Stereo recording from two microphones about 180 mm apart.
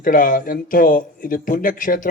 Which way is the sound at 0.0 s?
50° left (ahead or behind).